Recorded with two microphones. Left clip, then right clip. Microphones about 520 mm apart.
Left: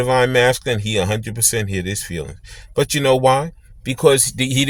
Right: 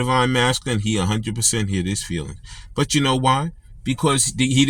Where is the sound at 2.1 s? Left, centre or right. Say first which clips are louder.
Left 2 dB; left.